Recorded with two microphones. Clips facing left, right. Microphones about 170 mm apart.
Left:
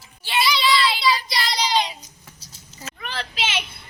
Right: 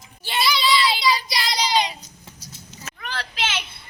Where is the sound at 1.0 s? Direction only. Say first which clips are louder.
Even; 15° right (ahead or behind).